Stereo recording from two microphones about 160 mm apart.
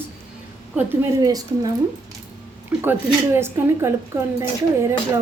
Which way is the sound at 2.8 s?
15° right (ahead or behind).